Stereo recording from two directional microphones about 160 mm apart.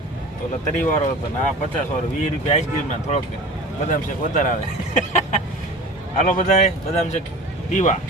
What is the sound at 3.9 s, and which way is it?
Speech, 50° left (ahead or behind).